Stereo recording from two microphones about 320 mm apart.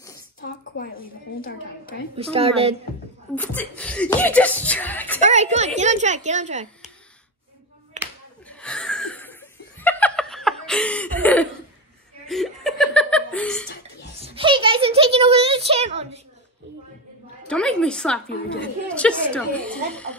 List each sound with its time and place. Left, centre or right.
0.4 s a woman's voice: left
2.1 s a woman's voice: centre
3.3 s speech: centre
5.2 s a woman's voice: right
8.0 s clapping: right
8.5 s laughter: centre
12.3 s chuckle: centre
14.2 s a sound: centre
17.5 s speech: centre
18.3 s a woman's voice: left
18.9 s speech: centre